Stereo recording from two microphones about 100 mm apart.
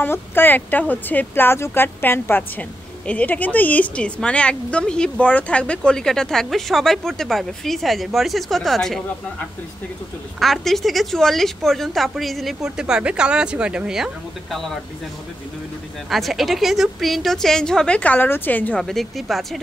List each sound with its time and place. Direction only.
0.0 s a woman's voice: 20° left (ahead or behind); by 9.0 s 5° left (ahead or behind)
10.4 s a woman's voice: centre (ahead or behind)
16.1 s a woman's voice: centre (ahead or behind); by 18.8 s 15° left (ahead or behind)
18.8 s a woman's voice: centre (ahead or behind)